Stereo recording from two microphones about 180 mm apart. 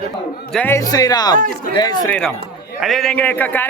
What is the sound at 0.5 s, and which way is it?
Speech, 15° left (ahead or behind).